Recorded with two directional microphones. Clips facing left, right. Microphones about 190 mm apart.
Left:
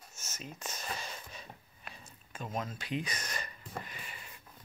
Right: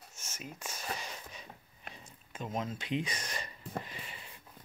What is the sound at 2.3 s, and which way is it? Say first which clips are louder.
Speech: right 2 dB; 20° right (ahead or behind).